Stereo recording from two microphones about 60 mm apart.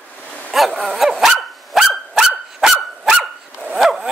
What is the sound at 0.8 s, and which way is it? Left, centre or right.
Dog, centre.